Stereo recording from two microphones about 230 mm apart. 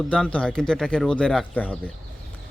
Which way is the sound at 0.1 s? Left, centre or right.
Centre.